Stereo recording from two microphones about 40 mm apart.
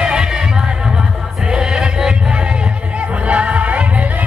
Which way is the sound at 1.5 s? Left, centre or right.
Centre.